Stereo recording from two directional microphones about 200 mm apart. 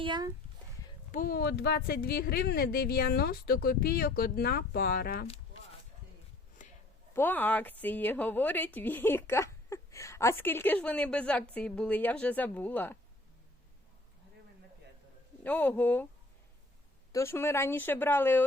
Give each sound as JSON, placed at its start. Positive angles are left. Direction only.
{"t": 0.0, "sound": "speech", "side_deg": -20}
{"t": 1.1, "sound": "speech", "side_deg": 45}
{"t": 7.1, "sound": "speech", "side_deg": 10}
{"t": 15.4, "sound": "speech", "side_deg": 10}
{"t": 17.1, "sound": "speech", "side_deg": 15}